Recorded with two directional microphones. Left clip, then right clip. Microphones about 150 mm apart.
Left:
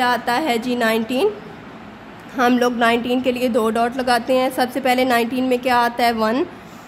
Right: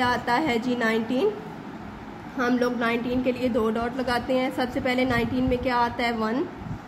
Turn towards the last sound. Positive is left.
turn(degrees=45)  # may be behind; listen again after turning